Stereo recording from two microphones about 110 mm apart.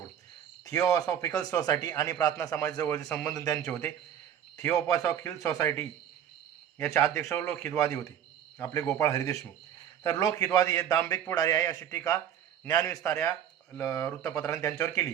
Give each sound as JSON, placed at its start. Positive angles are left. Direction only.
{"t": 0.6, "sound": "a man's voice", "side_deg": 30}
{"t": 6.9, "sound": "a man's voice", "side_deg": 25}